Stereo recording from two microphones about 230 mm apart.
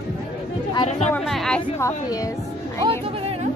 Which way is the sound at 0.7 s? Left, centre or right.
Left.